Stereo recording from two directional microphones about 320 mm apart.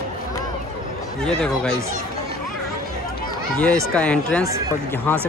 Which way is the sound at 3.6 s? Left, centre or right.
Centre.